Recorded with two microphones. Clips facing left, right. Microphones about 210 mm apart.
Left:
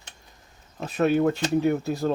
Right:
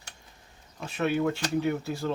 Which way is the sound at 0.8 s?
40° left (ahead or behind).